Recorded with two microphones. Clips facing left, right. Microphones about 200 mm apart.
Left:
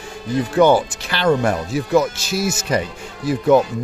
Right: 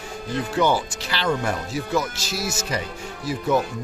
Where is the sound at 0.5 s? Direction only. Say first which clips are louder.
Left 8 dB; 55° left (ahead or behind).